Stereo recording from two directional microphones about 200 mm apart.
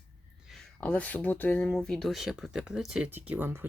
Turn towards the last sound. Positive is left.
turn(degrees=-10)  # may be behind; listen again after turning